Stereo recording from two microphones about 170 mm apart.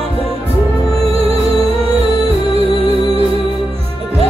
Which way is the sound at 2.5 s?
35° right (ahead or behind).